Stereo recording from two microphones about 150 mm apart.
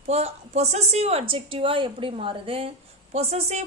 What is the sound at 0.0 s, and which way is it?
A woman's voice, 45° right (ahead or behind).